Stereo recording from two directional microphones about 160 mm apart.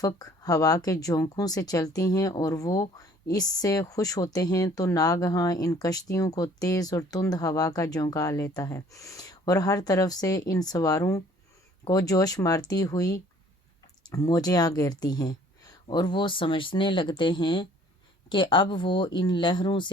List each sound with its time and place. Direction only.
0.0 s speech: 20° left (ahead or behind)